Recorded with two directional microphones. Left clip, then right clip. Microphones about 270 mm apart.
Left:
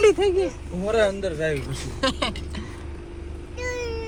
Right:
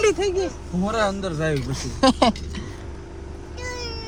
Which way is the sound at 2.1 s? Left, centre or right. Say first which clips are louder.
Right 8 dB; right.